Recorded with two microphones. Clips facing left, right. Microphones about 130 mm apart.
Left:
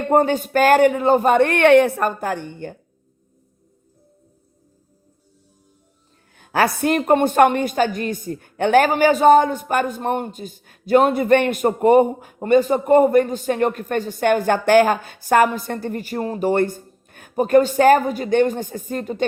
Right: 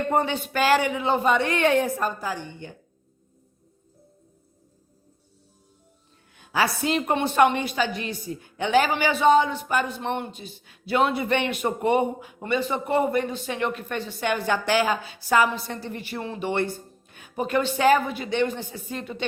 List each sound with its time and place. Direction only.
0.1 s a woman's voice: 45° left (ahead or behind)
6.3 s a woman's voice: 50° left (ahead or behind)